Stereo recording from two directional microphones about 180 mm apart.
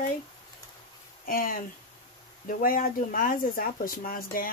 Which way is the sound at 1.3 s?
50° left (ahead or behind).